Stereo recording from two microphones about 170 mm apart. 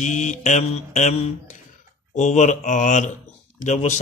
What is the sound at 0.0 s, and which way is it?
Mantra, 45° left (ahead or behind).